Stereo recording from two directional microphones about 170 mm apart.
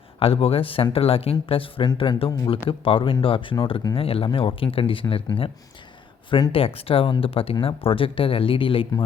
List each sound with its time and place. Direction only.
0.2 s speech: 35° left (ahead or behind)